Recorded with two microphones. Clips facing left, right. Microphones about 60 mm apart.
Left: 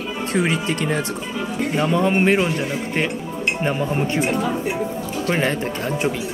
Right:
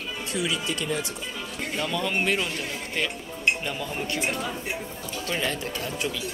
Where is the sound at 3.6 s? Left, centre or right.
Left.